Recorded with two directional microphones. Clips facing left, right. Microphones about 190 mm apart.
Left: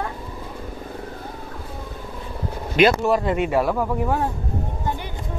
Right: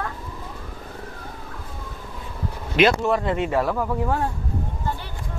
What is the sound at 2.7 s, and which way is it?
Speech, centre (ahead or behind).